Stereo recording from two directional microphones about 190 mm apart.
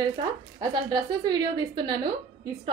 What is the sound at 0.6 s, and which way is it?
Speech, 20° right (ahead or behind).